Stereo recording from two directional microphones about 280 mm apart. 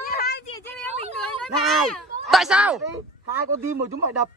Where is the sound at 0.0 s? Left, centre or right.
Left.